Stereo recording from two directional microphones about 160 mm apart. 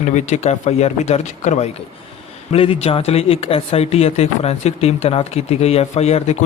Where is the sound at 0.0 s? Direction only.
45° left (ahead or behind).